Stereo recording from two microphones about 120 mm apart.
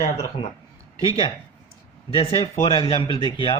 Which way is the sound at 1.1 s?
40° left (ahead or behind).